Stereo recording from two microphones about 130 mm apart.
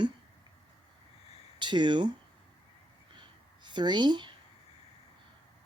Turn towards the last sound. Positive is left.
turn(degrees=-35)  # may be behind; listen again after turning